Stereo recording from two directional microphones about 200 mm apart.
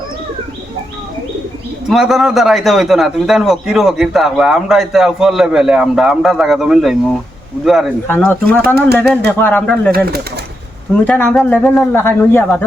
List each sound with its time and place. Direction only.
1.9 s a man's voice: centre (ahead or behind)
8.0 s a man's voice: 10° left (ahead or behind)
8.6 s speech: 55° right (ahead or behind)
9.4 s a man's voice: 10° left (ahead or behind)
11.0 s a man's voice: 10° left (ahead or behind)